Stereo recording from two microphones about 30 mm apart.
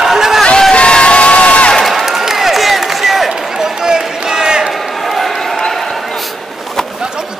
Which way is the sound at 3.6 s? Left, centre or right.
Right.